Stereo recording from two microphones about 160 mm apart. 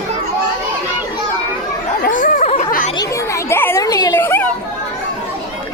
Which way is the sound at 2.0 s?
55° left (ahead or behind).